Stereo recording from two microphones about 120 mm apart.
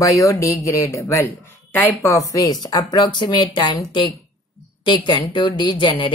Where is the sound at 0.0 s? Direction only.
30° left (ahead or behind).